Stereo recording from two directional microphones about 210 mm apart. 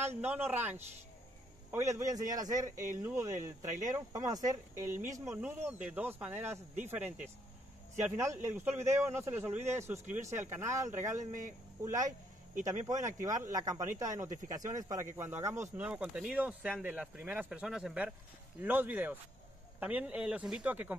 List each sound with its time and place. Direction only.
0.0 s speech: 10° right (ahead or behind)
2.7 s speech: 40° right (ahead or behind)
3.0 s speech: 10° right (ahead or behind)
8.0 s speech: 15° right (ahead or behind)